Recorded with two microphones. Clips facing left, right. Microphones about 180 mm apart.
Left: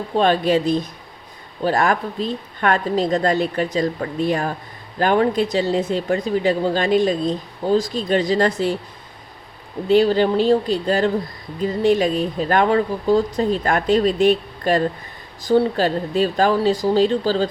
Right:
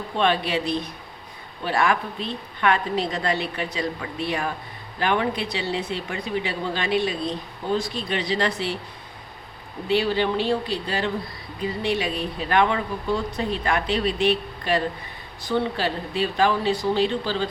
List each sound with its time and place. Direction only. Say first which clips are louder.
0.2 s speech: left 6 dB; 40° left (ahead or behind)
9.9 s speech: left 7 dB; 40° left (ahead or behind)